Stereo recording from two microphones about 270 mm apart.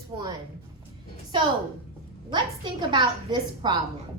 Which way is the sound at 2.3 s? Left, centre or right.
Centre.